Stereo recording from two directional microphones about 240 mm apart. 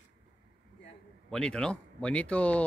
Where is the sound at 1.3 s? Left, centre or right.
Centre.